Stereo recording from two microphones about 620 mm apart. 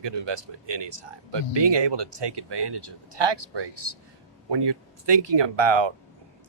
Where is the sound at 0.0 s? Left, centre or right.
Right.